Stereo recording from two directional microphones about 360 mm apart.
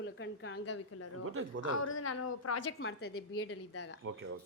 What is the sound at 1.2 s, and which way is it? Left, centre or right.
Speech, right.